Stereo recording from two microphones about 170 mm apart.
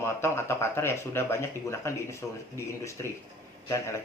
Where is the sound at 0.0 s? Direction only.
15° left (ahead or behind).